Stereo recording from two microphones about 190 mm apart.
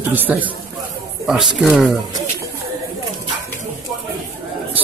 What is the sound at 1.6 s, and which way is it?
Speech, centre (ahead or behind).